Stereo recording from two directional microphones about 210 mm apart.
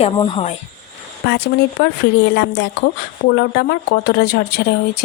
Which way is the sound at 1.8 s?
55° left (ahead or behind).